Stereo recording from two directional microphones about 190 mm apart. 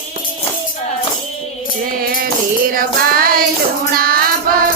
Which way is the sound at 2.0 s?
50° right (ahead or behind).